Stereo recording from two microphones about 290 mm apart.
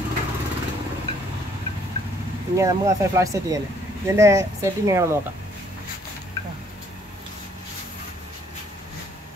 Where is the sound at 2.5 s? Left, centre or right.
Centre.